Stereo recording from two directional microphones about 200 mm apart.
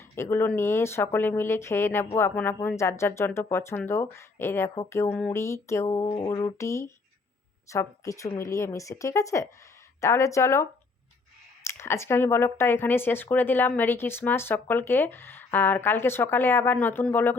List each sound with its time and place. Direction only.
0.2 s speech: 10° left (ahead or behind)